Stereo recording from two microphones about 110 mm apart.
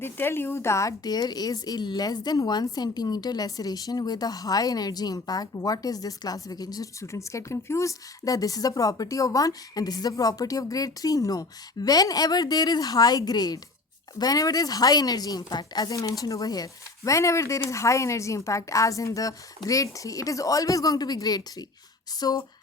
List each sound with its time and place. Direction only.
0.0 s a woman's voice: 20° left (ahead or behind); by 22.4 s 35° left (ahead or behind)